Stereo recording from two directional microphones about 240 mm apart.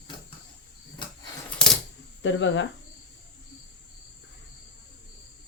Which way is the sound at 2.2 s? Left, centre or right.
Left.